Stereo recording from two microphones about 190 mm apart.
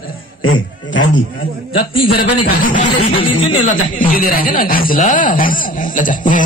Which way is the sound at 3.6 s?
45° left (ahead or behind).